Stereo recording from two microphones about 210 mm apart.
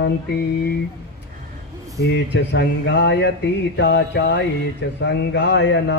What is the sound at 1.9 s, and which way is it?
Speech, 55° left (ahead or behind).